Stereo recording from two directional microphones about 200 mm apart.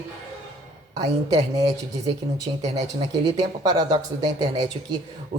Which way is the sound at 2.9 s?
20° right (ahead or behind).